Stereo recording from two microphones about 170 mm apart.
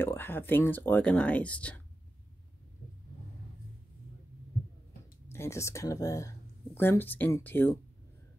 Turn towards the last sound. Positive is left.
turn(degrees=10)  # may be behind; listen again after turning